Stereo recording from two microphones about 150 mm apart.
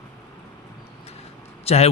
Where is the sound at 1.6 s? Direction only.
45° left (ahead or behind).